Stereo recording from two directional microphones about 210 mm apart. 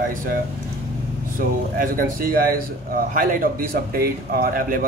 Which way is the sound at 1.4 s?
40° right (ahead or behind).